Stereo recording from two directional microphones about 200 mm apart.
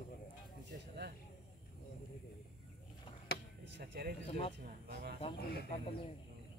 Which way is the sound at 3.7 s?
50° right (ahead or behind).